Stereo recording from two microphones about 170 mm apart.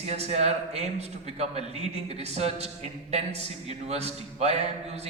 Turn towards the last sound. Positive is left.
turn(degrees=-40)  # may be behind; listen again after turning